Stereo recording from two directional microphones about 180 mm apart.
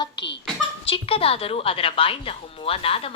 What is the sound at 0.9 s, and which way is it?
Speech, 30° left (ahead or behind).